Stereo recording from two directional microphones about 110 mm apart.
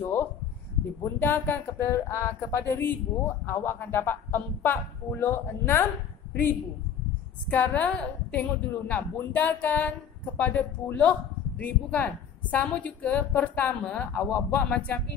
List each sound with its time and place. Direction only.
0.0 s a sound: 20° left (ahead or behind)
1.0 s speech: 20° left (ahead or behind)
7.4 s a woman's voice: 15° left (ahead or behind)